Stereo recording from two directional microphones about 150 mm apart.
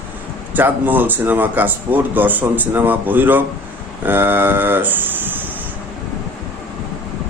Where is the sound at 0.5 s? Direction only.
10° right (ahead or behind).